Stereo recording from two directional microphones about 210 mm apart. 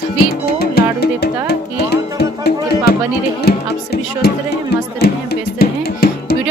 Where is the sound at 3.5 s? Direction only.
45° left (ahead or behind).